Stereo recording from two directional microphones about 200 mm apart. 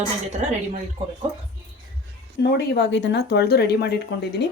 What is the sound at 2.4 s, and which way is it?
Speech, 55° left (ahead or behind).